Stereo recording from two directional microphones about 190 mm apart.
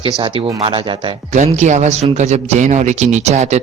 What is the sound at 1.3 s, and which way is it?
Speech, 40° right (ahead or behind).